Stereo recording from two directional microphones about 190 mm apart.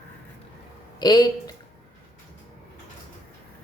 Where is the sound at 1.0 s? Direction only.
20° left (ahead or behind).